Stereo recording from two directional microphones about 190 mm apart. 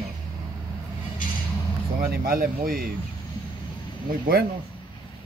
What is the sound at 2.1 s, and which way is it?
Speech, 50° right (ahead or behind).